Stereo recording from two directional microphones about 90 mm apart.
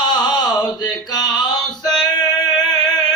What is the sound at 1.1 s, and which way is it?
Music, 45° left (ahead or behind).